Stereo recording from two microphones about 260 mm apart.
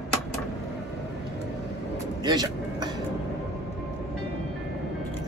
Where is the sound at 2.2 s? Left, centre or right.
Centre.